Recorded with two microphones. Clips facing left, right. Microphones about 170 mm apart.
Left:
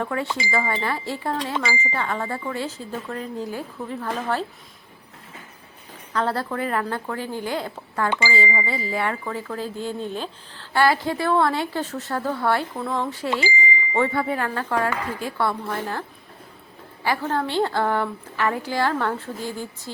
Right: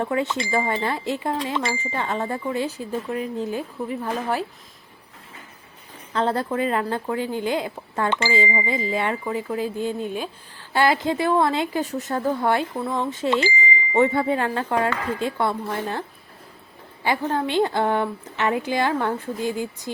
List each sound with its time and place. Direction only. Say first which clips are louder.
0.0 s a woman's voice: right 3 dB; 20° right (ahead or behind)
1.5 s speech: even; centre (ahead or behind)
1.9 s speech: right 1 dB; 20° right (ahead or behind)
6.1 s a woman's voice: right 2 dB; 20° right (ahead or behind)